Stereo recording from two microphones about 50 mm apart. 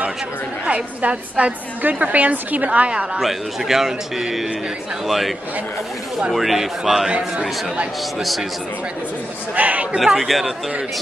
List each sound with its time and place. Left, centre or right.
0.7 s a woman's voice: right
3.2 s a man's voice: centre
6.3 s speech: centre
7.1 s a woman's voice: right
8.2 s speech: centre
9.6 s a man's voice: right
9.9 s speech: centre